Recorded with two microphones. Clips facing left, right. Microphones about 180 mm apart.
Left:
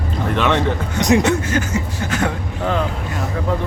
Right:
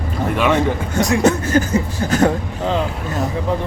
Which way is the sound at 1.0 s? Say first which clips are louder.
Left 3 dB; 20° left (ahead or behind).